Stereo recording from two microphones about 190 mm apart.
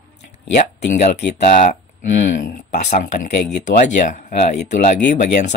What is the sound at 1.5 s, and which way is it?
Speech, 40° left (ahead or behind).